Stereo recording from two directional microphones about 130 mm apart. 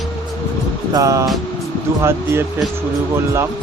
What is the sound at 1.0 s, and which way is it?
Speech, 25° right (ahead or behind).